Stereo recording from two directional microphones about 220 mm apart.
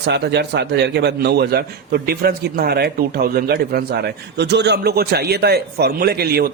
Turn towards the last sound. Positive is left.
turn(degrees=-45)  # may be behind; listen again after turning